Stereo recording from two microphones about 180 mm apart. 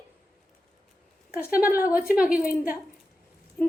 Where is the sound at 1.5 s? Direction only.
55° left (ahead or behind).